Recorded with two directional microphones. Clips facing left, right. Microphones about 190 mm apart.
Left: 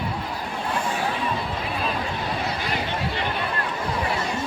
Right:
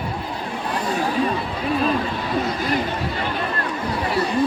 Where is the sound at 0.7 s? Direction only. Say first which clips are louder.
Right 2 dB; 40° right (ahead or behind).